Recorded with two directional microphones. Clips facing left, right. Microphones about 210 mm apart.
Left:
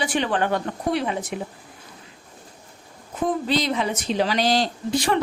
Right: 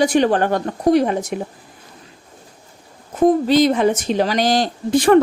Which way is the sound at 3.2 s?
45° right (ahead or behind).